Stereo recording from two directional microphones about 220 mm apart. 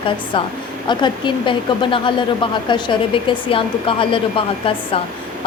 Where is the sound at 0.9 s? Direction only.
20° left (ahead or behind).